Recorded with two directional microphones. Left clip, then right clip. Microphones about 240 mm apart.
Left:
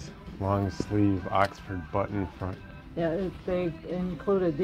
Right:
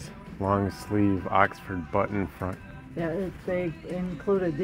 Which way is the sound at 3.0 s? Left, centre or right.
Centre.